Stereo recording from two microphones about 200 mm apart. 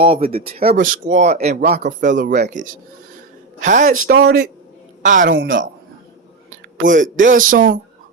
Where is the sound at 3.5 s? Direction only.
40° right (ahead or behind).